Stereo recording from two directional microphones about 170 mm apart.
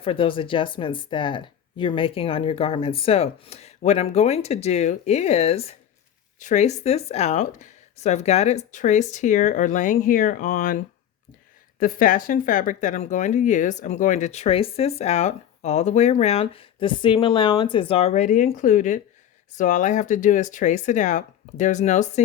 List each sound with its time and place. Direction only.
0.0 s speech: 30° left (ahead or behind)